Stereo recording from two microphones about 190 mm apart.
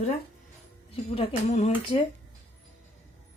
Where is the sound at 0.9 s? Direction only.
35° left (ahead or behind).